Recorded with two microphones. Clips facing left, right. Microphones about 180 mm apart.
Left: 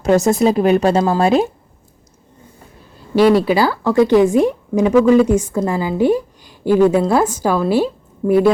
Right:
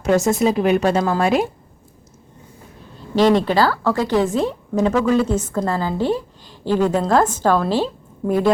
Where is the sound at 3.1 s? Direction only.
10° left (ahead or behind).